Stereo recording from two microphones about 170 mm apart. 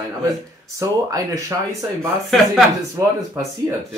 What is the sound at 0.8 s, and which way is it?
Speech, 20° right (ahead or behind).